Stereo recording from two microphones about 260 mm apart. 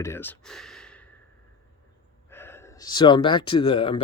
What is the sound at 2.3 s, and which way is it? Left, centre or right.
Speech, centre.